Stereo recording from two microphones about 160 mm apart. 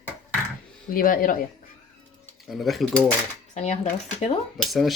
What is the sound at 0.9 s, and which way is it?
Speech, 60° left (ahead or behind).